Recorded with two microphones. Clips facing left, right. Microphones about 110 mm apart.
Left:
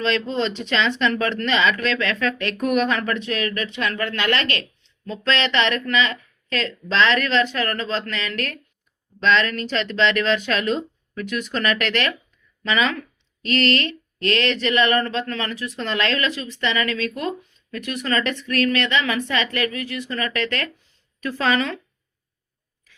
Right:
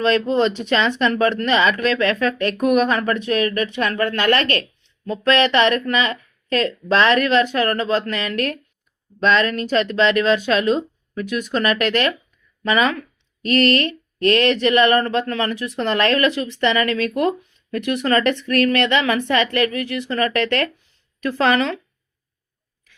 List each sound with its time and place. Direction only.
0.0 s speech: 45° right (ahead or behind)